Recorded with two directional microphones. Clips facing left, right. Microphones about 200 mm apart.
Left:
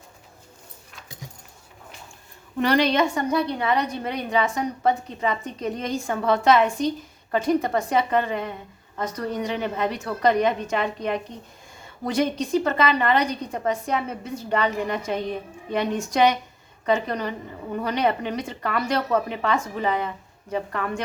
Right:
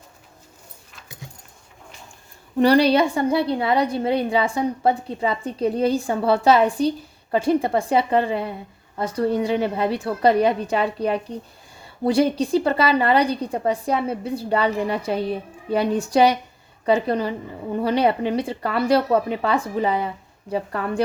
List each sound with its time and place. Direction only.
2.6 s a woman's voice: 35° right (ahead or behind)